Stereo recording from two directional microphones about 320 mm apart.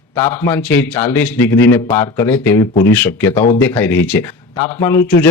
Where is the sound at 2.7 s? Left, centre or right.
Left.